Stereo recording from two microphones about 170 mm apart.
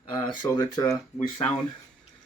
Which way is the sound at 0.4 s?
25° left (ahead or behind).